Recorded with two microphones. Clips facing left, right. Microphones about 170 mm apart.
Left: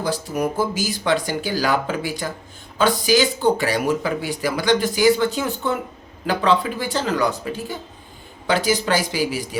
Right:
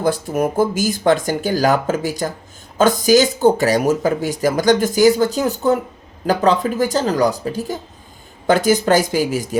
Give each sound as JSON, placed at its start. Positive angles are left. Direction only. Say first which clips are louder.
{"t": 0.0, "sound": "speech", "louder": "right 5 dB", "side_deg": -50}